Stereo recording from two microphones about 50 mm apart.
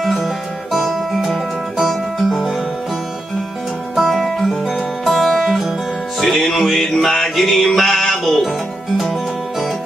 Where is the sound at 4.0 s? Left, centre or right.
Centre.